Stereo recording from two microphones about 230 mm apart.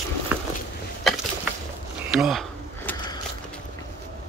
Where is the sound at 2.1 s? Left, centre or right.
Centre.